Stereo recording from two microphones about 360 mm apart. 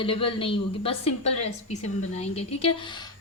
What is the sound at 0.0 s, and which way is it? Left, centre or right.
Speech, centre.